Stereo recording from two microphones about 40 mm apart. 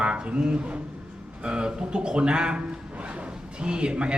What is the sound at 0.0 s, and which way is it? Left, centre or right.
A man's voice, right.